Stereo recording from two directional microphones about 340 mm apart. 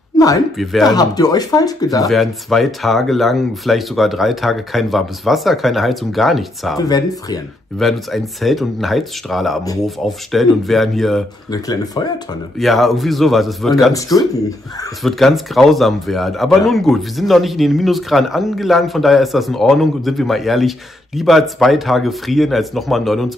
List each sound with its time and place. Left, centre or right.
0.1 s a sound: centre
0.6 s speech: centre
0.8 s speech: centre
2.0 s speech: centre
6.8 s speech: centre
7.8 s speech: centre
11.5 s speech: centre
12.5 s speech: centre